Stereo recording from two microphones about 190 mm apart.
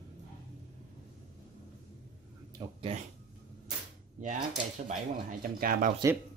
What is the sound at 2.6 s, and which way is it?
Speech, 20° right (ahead or behind).